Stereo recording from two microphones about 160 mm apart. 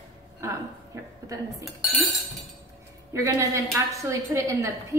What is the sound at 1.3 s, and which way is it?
Speech, 20° right (ahead or behind).